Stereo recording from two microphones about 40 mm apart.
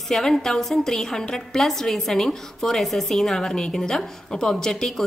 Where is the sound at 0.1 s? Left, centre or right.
Centre.